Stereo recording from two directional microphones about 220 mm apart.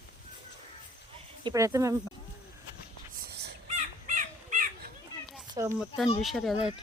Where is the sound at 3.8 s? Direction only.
35° right (ahead or behind).